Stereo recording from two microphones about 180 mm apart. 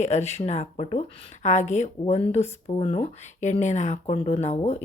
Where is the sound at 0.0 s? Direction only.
40° left (ahead or behind).